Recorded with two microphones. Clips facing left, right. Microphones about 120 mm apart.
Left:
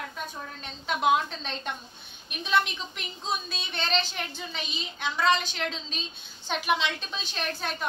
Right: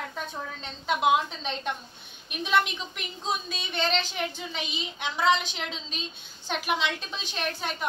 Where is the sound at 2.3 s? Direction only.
10° right (ahead or behind).